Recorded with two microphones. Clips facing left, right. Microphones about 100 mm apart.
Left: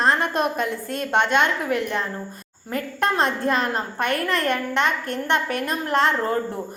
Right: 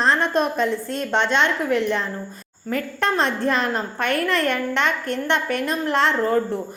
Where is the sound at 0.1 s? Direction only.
50° left (ahead or behind).